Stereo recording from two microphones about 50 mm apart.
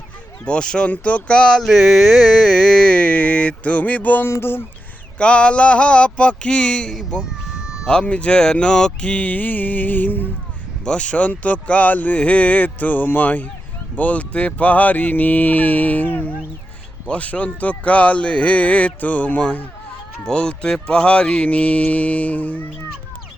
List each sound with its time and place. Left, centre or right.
0.4 s speech: centre
0.9 s speech: left
1.6 s a sound: centre; by 4.3 s left
4.3 s speech: left
5.1 s speech: left
7.3 s a sound: centre
8.0 s speech: left
10.8 s speech: left
20.2 s speech: centre; by 22.7 s left